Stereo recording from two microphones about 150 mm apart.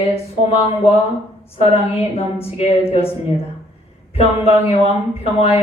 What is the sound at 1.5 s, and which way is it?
A woman's voice, 40° left (ahead or behind).